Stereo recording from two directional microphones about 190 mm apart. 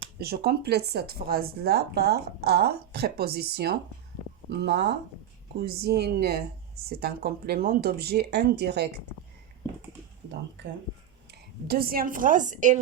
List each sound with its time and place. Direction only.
0.2 s speech: 55° right (ahead or behind)
11.3 s a woman's voice: 55° right (ahead or behind)